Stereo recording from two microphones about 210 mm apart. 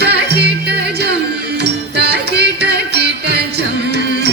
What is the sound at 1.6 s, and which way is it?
Music, 50° right (ahead or behind).